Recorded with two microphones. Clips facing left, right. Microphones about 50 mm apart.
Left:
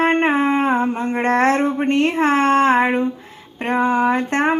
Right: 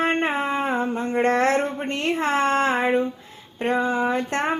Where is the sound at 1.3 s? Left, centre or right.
Left.